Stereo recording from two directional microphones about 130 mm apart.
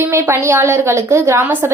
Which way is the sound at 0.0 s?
15° right (ahead or behind).